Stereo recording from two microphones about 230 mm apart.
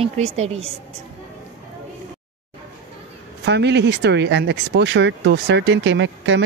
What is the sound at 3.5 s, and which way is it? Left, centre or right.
Speech, right.